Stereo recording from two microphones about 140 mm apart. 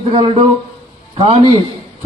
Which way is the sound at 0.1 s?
40° right (ahead or behind).